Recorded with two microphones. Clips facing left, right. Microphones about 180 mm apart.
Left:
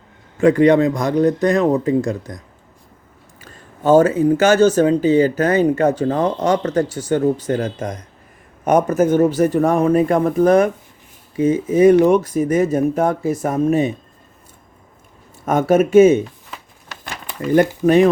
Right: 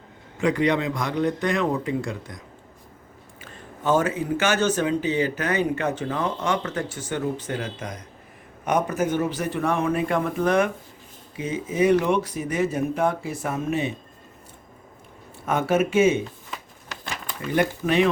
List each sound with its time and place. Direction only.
0.3 s a man's voice: 50° left (ahead or behind)
3.4 s a man's voice: 40° left (ahead or behind)
15.4 s a man's voice: 45° left (ahead or behind)
17.5 s a man's voice: 45° left (ahead or behind)